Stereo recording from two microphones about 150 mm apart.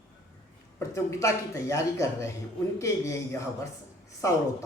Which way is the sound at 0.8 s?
20° left (ahead or behind).